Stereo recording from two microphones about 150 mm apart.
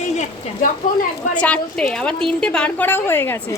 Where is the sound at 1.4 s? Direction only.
10° left (ahead or behind).